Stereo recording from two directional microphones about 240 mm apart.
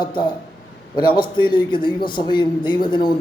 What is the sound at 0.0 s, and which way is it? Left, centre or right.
A man's voice, centre.